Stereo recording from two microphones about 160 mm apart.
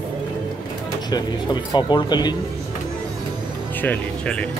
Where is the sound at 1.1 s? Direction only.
25° left (ahead or behind).